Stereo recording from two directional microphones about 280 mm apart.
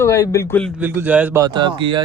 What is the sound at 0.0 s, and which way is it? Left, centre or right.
Speech, centre.